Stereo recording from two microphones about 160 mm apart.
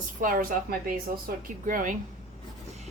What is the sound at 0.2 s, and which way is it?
Speech, 60° right (ahead or behind).